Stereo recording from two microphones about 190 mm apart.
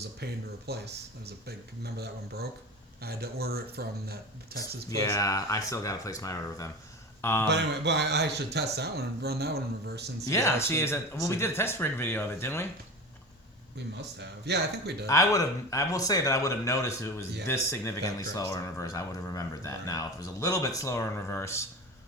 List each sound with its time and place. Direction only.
0.2 s speech: 60° right (ahead or behind)
4.9 s speech: 15° left (ahead or behind)
7.2 s a sound: 10° left (ahead or behind)
7.4 s speech: 65° right (ahead or behind)
10.2 s speech: 15° left (ahead or behind)
13.9 s speech: 65° right (ahead or behind)
15.0 s speech: 15° left (ahead or behind)